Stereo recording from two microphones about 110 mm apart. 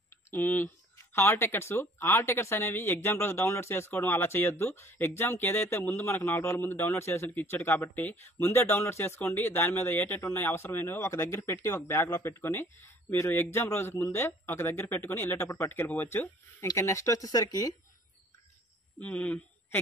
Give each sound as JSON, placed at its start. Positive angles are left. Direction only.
{"t": 0.3, "sound": "speech", "side_deg": 15}
{"t": 18.9, "sound": "a man's voice", "side_deg": 15}